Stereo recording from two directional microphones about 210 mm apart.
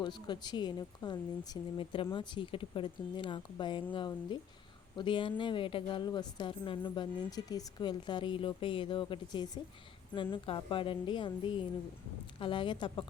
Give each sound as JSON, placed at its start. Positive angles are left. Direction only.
{"t": 0.0, "sound": "a woman's voice", "side_deg": 20}